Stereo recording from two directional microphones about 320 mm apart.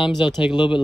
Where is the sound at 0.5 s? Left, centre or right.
Centre.